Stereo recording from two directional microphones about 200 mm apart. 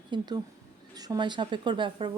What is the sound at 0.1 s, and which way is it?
A woman's voice, 20° right (ahead or behind).